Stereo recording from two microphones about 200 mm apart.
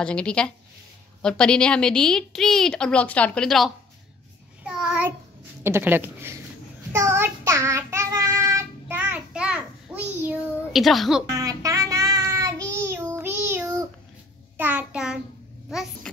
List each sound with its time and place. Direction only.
0.0 s a woman's voice: 5° left (ahead or behind)
4.6 s child singing: 5° right (ahead or behind)
5.6 s speech: 10° right (ahead or behind)
6.9 s child singing: 15° right (ahead or behind)
11.2 s child singing: 15° right (ahead or behind)
14.6 s speech: 10° right (ahead or behind)
15.7 s a sound: centre (ahead or behind)